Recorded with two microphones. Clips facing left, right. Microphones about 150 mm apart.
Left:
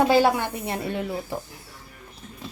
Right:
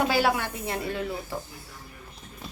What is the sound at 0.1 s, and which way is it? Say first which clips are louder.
Speech: left 5 dB; 20° left (ahead or behind).